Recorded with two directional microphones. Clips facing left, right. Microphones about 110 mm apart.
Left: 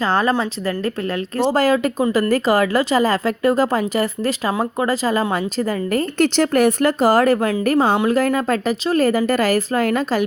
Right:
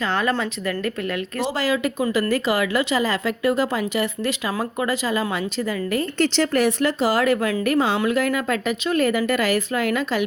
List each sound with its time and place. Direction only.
0.0 s a woman's voice: 35° left (ahead or behind)